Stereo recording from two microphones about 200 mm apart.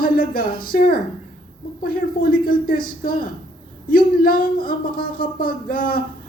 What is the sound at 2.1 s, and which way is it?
A woman's voice, 45° left (ahead or behind).